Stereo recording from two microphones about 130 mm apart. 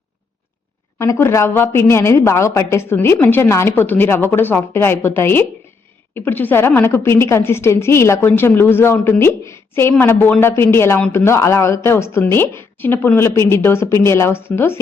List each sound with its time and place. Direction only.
0.9 s a woman's voice: 20° left (ahead or behind)